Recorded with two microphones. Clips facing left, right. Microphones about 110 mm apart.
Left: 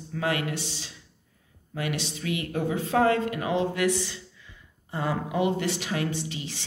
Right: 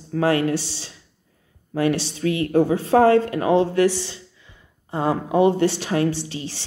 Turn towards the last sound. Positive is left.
turn(degrees=-30)  # may be behind; listen again after turning